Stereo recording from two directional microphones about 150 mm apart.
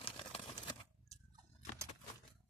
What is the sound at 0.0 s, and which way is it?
Crumpling, 35° left (ahead or behind).